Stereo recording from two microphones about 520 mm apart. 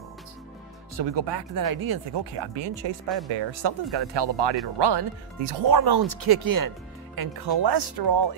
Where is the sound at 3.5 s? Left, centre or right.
Right.